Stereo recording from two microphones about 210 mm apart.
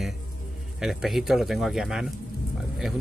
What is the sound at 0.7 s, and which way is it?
Speech, centre (ahead or behind).